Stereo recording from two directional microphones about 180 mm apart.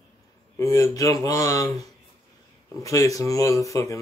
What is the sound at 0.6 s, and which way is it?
Speech, 20° left (ahead or behind).